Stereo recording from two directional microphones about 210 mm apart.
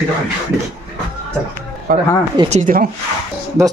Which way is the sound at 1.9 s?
40° right (ahead or behind).